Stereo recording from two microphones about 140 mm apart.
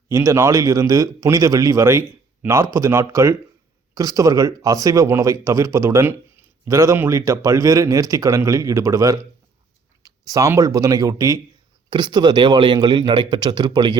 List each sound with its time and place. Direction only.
0.1 s speech: 20° right (ahead or behind)
11.9 s a man's voice: 35° right (ahead or behind)